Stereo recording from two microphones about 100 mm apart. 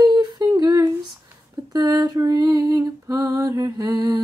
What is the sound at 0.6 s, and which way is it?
Female singing, 40° right (ahead or behind).